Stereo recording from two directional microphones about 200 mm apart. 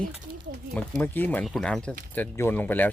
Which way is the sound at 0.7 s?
10° left (ahead or behind).